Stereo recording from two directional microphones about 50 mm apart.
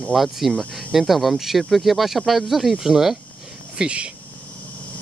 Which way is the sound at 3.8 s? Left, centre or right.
Right.